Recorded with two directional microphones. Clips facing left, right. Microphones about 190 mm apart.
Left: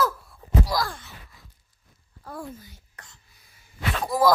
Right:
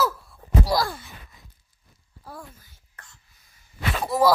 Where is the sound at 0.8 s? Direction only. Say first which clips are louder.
Right 3 dB; 15° right (ahead or behind).